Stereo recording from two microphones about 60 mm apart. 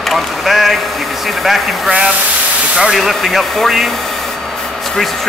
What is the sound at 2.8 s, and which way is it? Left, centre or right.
Speech, centre.